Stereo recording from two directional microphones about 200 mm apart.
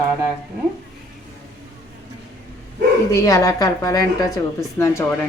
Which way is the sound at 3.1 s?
15° left (ahead or behind).